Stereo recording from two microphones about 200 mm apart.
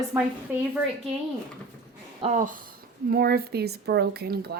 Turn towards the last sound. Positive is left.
turn(degrees=-50)  # may be behind; listen again after turning